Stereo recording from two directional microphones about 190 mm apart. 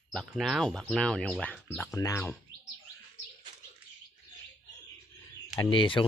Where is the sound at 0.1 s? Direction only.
Centre (ahead or behind).